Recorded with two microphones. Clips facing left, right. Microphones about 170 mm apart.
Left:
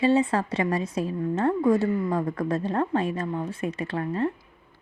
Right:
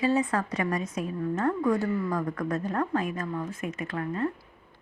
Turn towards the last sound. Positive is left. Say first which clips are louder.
# left 3 dB
turn(degrees=30)  # may be behind; listen again after turning